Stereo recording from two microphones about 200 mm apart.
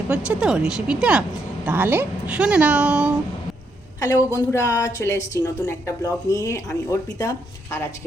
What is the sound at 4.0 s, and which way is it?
Speech, 15° left (ahead or behind).